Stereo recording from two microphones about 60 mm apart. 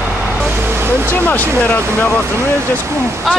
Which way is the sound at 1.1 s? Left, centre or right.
Left.